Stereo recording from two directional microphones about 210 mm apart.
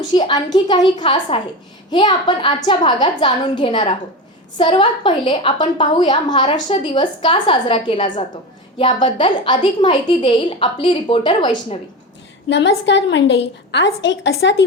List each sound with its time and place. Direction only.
0.1 s a woman's voice: 20° left (ahead or behind)
12.5 s a woman's voice: 60° left (ahead or behind)